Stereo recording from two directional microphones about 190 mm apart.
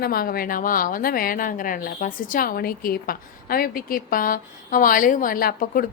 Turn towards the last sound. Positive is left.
turn(degrees=50)  # may be behind; listen again after turning